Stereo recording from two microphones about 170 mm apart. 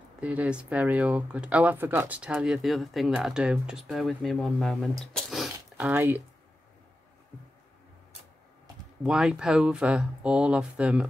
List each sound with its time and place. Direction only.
0.2 s speech: 10° right (ahead or behind)
5.1 s a sound: centre (ahead or behind)
9.0 s speech: 5° right (ahead or behind)